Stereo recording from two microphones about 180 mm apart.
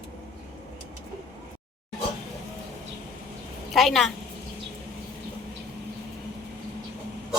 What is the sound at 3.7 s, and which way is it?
Speech, centre (ahead or behind).